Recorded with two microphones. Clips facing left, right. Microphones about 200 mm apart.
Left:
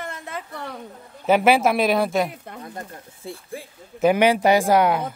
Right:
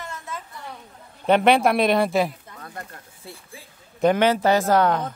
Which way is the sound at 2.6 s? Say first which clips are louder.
Left 1 dB; 20° left (ahead or behind).